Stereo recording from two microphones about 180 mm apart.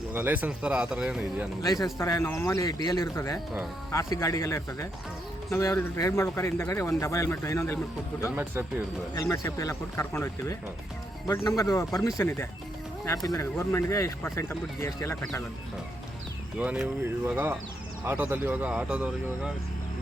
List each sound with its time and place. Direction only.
0.1 s speech: 10° right (ahead or behind)
1.6 s speech: 20° left (ahead or behind)
9.1 s speech: 20° left (ahead or behind)
16.6 s speech: 10° right (ahead or behind)